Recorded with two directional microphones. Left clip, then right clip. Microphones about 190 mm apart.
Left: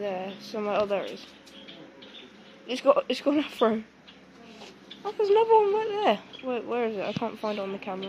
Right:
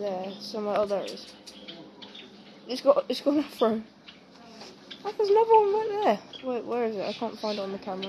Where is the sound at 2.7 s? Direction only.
10° left (ahead or behind).